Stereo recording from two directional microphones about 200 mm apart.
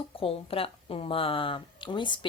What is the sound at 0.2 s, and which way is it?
Speech, 30° left (ahead or behind).